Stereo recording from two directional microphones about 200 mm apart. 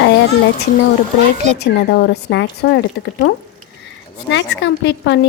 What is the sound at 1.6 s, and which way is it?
A woman's voice, 55° left (ahead or behind).